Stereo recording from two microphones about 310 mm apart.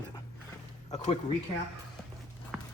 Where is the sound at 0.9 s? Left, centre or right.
Left.